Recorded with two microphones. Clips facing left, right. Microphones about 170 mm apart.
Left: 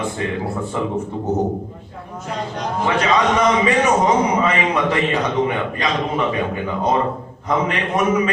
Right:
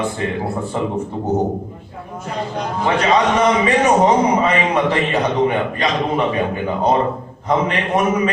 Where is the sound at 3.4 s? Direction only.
35° right (ahead or behind).